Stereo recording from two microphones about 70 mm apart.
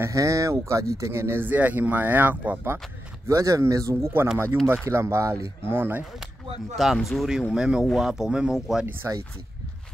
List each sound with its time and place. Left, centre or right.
0.0 s speech: right
1.4 s speech: right
3.3 s speech: right
6.8 s speech: centre
9.0 s speech: right